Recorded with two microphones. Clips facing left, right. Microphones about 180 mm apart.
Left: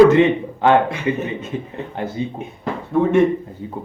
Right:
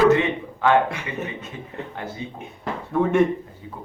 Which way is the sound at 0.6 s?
25° left (ahead or behind).